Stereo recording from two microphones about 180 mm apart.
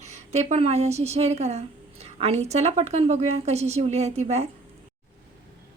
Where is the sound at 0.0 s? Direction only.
40° right (ahead or behind).